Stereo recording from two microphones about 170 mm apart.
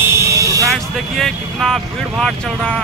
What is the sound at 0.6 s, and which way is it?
Vehicle, centre (ahead or behind).